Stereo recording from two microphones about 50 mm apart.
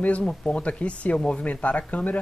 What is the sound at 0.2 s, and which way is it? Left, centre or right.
Speech, centre.